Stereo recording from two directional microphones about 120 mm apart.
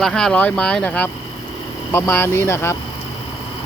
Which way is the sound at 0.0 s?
5° left (ahead or behind).